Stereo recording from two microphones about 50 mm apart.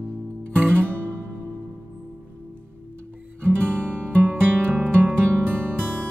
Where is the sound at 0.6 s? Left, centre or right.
Right.